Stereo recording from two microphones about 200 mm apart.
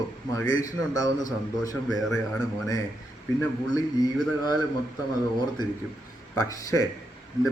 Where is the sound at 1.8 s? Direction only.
Centre (ahead or behind).